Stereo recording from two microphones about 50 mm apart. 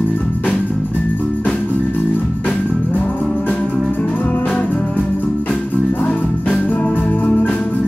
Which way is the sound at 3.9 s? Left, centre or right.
Left.